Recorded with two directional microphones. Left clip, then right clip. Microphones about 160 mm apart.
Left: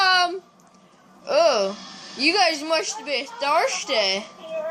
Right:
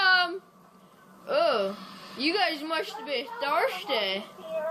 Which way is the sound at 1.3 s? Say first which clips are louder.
Left 6 dB; 55° left (ahead or behind).